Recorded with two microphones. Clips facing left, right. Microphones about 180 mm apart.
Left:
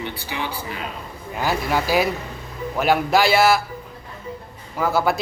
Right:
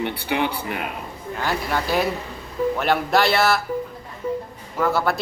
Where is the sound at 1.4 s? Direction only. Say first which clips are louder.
Left 3 dB; 5° left (ahead or behind).